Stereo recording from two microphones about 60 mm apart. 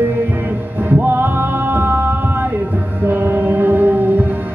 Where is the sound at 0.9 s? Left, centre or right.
Right.